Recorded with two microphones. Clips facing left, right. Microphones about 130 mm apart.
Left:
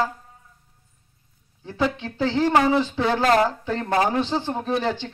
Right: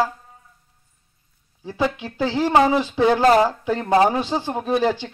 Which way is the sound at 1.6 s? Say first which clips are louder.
Right 1 dB; 10° right (ahead or behind).